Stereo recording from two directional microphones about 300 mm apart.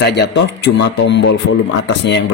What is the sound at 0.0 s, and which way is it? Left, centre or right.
A man's voice, left.